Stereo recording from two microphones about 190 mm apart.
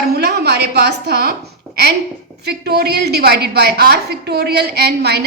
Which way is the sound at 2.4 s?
55° right (ahead or behind).